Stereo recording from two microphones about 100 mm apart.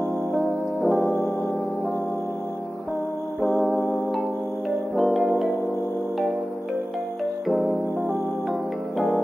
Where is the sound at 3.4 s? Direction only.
Centre (ahead or behind).